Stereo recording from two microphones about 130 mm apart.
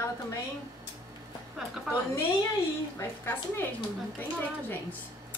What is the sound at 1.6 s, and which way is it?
Speech, 5° right (ahead or behind).